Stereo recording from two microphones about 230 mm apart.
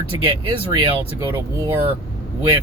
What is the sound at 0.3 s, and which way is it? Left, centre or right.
Speech, right.